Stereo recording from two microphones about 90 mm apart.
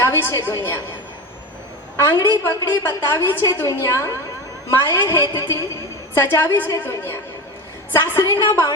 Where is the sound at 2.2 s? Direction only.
30° left (ahead or behind).